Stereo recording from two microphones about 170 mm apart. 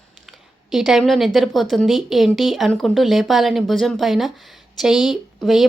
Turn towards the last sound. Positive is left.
turn(degrees=0)  # may be behind; listen again after turning